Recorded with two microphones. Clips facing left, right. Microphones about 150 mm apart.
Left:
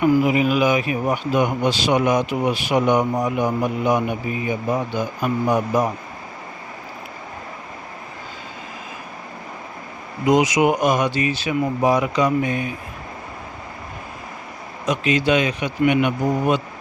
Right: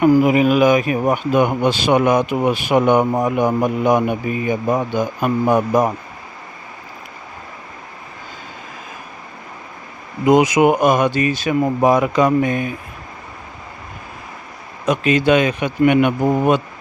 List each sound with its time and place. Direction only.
0.0 s speech: 50° right (ahead or behind)
10.2 s speech: 55° right (ahead or behind)
14.8 s speech: 50° right (ahead or behind)